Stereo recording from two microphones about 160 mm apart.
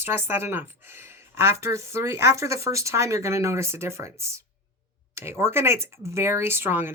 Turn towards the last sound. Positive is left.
turn(degrees=-15)  # may be behind; listen again after turning